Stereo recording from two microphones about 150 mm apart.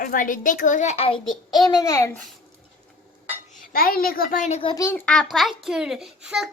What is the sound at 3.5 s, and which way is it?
A child's voice, 70° left (ahead or behind).